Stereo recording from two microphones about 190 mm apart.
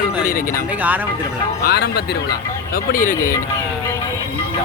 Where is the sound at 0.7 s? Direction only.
10° right (ahead or behind).